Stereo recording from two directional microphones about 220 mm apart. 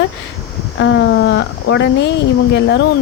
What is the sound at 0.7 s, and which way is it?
Speech, 55° left (ahead or behind).